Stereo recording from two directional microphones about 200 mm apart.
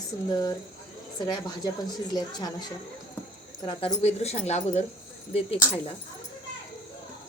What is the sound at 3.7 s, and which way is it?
Speech, 30° left (ahead or behind).